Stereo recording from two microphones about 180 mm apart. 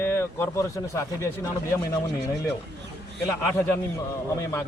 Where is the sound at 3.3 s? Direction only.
10° left (ahead or behind).